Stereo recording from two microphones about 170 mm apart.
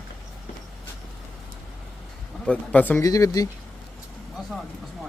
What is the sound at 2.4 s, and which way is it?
Speech, 5° left (ahead or behind).